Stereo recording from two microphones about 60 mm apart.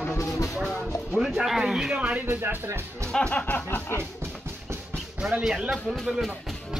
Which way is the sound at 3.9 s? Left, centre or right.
Right.